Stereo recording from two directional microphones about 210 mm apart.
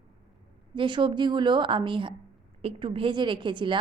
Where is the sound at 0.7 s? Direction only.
25° right (ahead or behind).